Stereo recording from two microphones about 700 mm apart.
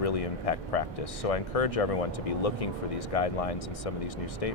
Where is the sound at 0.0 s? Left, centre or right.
Left.